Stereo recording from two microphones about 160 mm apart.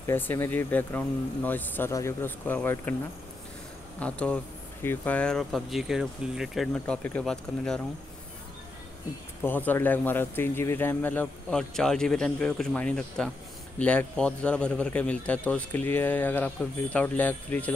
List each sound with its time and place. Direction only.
0.0 s a man's voice: 15° left (ahead or behind)
4.0 s a man's voice: 5° left (ahead or behind)
6.7 s a man's voice: 10° left (ahead or behind)
9.4 s a man's voice: 10° left (ahead or behind)